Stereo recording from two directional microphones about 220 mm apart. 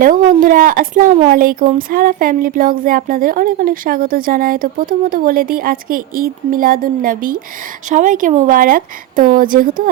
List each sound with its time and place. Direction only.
0.0 s speech: 40° right (ahead or behind)